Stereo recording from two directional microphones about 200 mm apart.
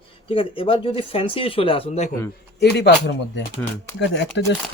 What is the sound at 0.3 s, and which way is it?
Speech, 25° left (ahead or behind).